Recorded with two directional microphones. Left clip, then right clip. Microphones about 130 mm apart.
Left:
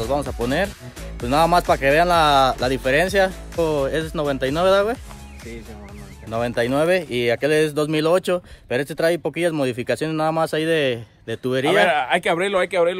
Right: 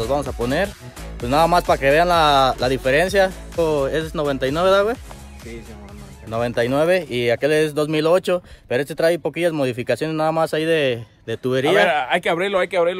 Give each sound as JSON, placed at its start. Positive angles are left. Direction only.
{"t": 0.0, "sound": "speech", "side_deg": 20}
{"t": 6.3, "sound": "speech", "side_deg": 15}
{"t": 7.1, "sound": "speech", "side_deg": 0}
{"t": 11.2, "sound": "speech", "side_deg": 25}
{"t": 11.9, "sound": "speech", "side_deg": -30}
{"t": 12.4, "sound": "speech", "side_deg": -5}